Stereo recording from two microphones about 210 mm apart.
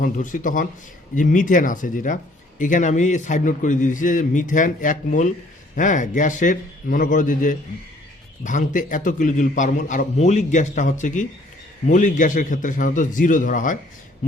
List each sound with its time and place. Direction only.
0.0 s a man's voice: 40° left (ahead or behind)